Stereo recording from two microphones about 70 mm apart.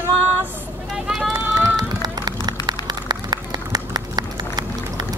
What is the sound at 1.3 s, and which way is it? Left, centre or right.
Run, right.